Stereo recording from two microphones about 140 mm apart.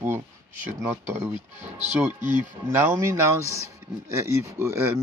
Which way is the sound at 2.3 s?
15° right (ahead or behind).